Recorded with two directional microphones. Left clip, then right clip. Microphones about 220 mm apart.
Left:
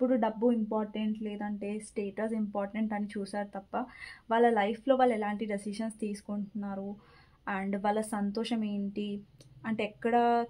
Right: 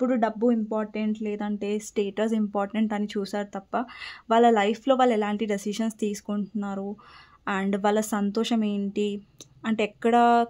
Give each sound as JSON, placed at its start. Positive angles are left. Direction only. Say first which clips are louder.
{"t": 0.0, "sound": "speech", "louder": "right 4 dB", "side_deg": -40}